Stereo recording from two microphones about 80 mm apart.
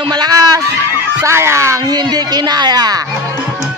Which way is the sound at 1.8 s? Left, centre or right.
Right.